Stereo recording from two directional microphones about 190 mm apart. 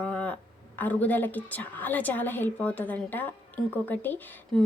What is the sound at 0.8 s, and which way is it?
Speech, 10° left (ahead or behind).